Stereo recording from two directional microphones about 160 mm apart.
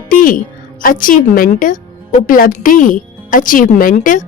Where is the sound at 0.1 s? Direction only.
60° left (ahead or behind).